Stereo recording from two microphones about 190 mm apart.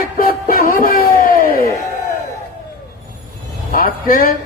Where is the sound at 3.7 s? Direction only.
50° left (ahead or behind).